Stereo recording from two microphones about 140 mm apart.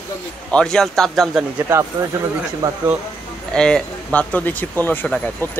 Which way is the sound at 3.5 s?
5° left (ahead or behind).